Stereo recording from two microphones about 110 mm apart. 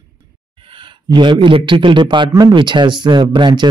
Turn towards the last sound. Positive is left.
turn(degrees=-45)  # may be behind; listen again after turning